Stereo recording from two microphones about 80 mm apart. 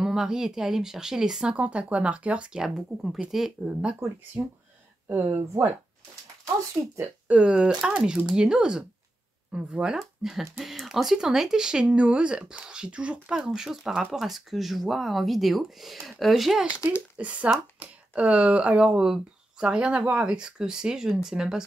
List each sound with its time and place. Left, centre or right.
0.0 s speech: centre
4.4 s speech: right
5.0 s speech: right
7.2 s speech: centre
16.6 s speech: centre